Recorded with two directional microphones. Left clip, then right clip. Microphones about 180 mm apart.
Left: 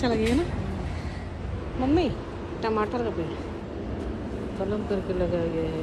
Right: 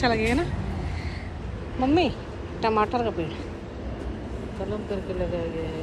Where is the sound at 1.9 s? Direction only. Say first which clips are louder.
Right 1 dB; 10° left (ahead or behind).